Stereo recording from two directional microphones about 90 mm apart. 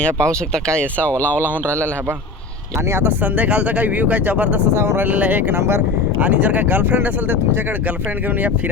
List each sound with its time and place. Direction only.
0.0 s speech: 10° left (ahead or behind)
2.9 s speech: 20° right (ahead or behind)
4.8 s speech: 25° right (ahead or behind)
6.1 s speech: 15° right (ahead or behind)